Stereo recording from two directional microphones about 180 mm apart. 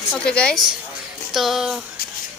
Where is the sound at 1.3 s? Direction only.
Centre (ahead or behind).